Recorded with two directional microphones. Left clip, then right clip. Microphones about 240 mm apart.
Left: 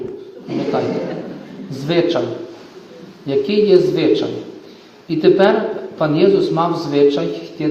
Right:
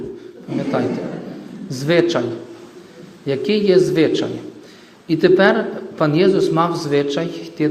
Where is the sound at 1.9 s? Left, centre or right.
Right.